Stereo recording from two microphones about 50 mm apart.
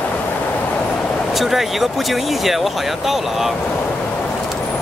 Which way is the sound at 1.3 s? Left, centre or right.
Centre.